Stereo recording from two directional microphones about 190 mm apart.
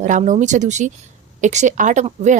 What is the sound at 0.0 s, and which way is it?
Speech, 40° right (ahead or behind).